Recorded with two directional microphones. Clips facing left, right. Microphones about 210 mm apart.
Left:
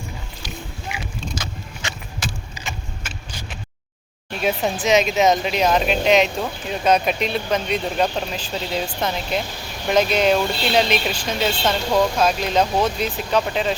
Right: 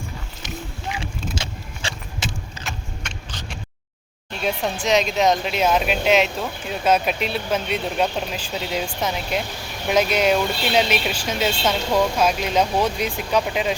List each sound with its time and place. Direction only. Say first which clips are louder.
1.4 s keys jangling: even; 25° right (ahead or behind)
2.6 s vehicle: left 1 dB; 5° left (ahead or behind)
4.4 s speech: left 3 dB; 5° left (ahead or behind)